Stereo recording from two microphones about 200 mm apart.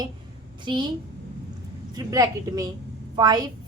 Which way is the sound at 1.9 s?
20° right (ahead or behind).